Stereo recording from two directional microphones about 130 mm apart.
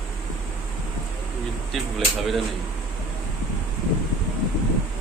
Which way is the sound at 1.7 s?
Centre (ahead or behind).